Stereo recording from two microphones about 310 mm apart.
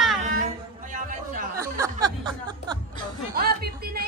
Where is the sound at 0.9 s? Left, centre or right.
Right.